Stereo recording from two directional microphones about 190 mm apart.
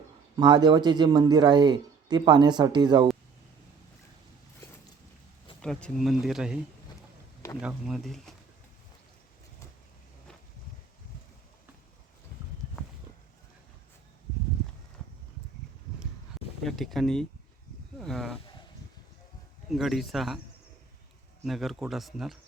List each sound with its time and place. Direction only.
0.3 s speech: 20° right (ahead or behind)
5.6 s speech: centre (ahead or behind)
7.6 s speech: 5° right (ahead or behind)
16.6 s speech: centre (ahead or behind)
19.7 s speech: centre (ahead or behind)
21.4 s speech: centre (ahead or behind)